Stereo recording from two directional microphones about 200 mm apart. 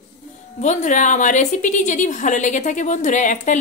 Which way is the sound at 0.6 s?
35° left (ahead or behind).